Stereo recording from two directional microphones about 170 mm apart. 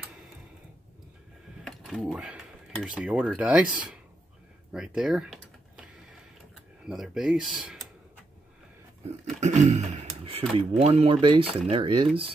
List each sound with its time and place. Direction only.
1.7 s a sound: centre (ahead or behind)
2.8 s speech: 5° right (ahead or behind)
4.7 s typing: 5° right (ahead or behind)
6.5 s speech: 5° right (ahead or behind)
9.2 s a sound: 40° right (ahead or behind)
10.8 s speech: 35° right (ahead or behind)